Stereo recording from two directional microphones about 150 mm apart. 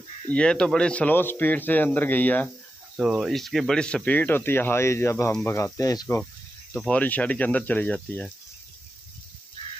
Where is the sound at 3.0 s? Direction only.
5° right (ahead or behind); by 6.2 s 20° left (ahead or behind).